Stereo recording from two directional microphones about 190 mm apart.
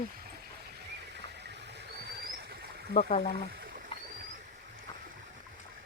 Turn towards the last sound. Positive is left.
turn(degrees=25)  # may be behind; listen again after turning